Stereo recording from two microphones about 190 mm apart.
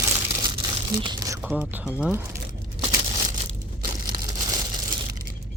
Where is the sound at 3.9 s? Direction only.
45° right (ahead or behind).